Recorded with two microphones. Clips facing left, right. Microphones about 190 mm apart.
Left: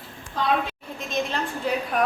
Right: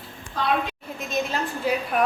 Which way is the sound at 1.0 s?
5° right (ahead or behind).